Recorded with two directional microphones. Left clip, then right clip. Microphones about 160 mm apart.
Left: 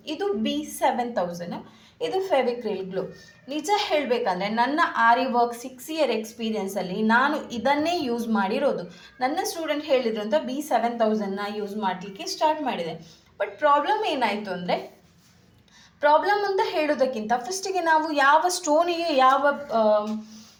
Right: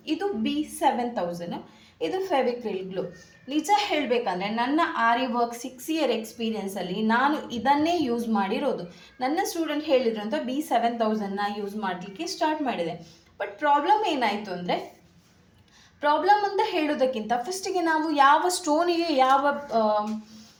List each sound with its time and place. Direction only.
0.0 s a woman's voice: 25° left (ahead or behind)
16.0 s a woman's voice: 25° left (ahead or behind)